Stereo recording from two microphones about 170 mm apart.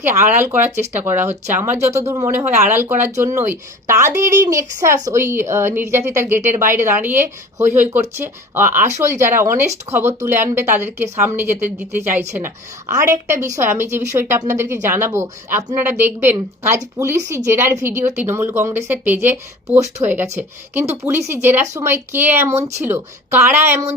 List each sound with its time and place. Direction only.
0.0 s a woman's voice: 15° right (ahead or behind)
6.4 s a woman's voice: 45° right (ahead or behind)
6.7 s a woman's voice: 15° right (ahead or behind)